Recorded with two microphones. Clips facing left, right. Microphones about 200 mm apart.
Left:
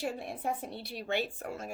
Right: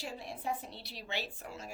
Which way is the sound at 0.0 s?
55° left (ahead or behind).